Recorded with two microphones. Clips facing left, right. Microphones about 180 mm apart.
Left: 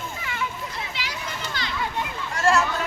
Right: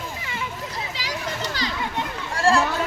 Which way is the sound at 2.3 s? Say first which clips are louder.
Right 1 dB; 30° right (ahead or behind).